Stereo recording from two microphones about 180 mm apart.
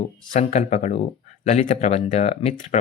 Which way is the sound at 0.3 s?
40° left (ahead or behind).